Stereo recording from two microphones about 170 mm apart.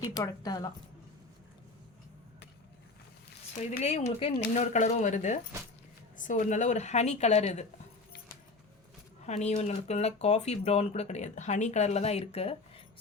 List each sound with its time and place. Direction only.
0.1 s a woman's voice: 20° left (ahead or behind)
3.7 s speech: 40° left (ahead or behind)
9.2 s speech: 40° left (ahead or behind)